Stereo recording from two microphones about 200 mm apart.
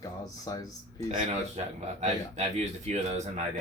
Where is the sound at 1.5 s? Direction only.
35° right (ahead or behind).